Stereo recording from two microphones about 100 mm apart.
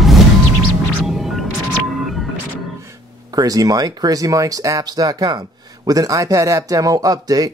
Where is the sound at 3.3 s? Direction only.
40° right (ahead or behind).